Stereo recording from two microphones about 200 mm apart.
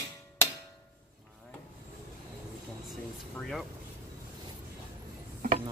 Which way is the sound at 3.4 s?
Centre (ahead or behind).